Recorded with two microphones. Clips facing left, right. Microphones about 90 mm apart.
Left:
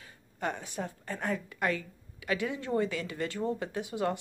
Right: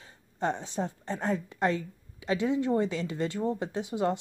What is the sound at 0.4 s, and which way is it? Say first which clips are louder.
A woman's voice: right 4 dB; 25° right (ahead or behind).